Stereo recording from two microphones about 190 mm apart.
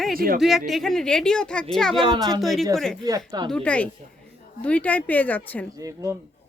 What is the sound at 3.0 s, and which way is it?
Speech, 15° right (ahead or behind).